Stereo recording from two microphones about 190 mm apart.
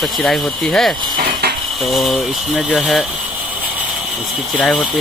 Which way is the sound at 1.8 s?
Centre (ahead or behind).